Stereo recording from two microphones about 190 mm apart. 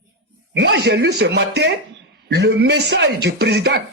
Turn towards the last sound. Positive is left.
turn(degrees=-60)  # may be behind; listen again after turning